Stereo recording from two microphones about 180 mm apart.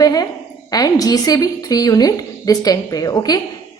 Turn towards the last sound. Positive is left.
turn(degrees=20)  # may be behind; listen again after turning